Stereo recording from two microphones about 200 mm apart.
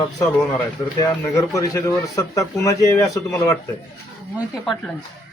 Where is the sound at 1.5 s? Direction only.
15° left (ahead or behind).